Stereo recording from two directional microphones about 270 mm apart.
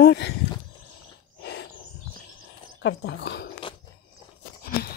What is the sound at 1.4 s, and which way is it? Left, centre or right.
Wild animals, left.